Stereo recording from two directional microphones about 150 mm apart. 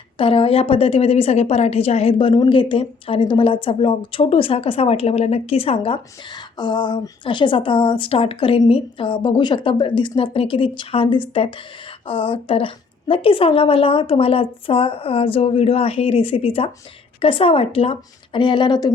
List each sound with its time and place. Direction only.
0.2 s a woman's voice: 35° left (ahead or behind)